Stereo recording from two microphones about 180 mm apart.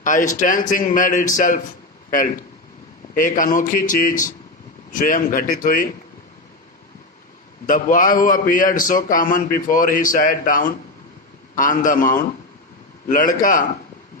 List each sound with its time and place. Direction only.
0.0 s a man's voice: 45° left (ahead or behind)
7.7 s a man's voice: 50° left (ahead or behind)